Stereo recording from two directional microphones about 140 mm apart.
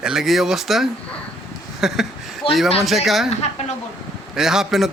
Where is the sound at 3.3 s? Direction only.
50° left (ahead or behind).